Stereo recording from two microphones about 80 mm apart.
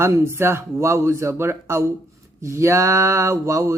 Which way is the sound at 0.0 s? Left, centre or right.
Right.